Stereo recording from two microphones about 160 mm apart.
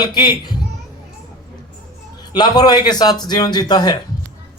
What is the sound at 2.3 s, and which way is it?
A man's voice, 25° left (ahead or behind).